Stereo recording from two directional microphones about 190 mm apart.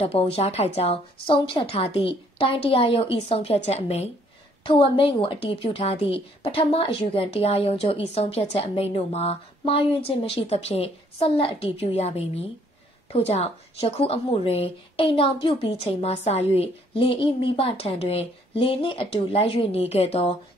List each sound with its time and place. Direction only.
0.0 s a woman's voice: 30° left (ahead or behind)